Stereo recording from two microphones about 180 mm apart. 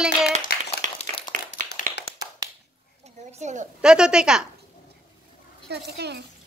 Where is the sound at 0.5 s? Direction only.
60° left (ahead or behind).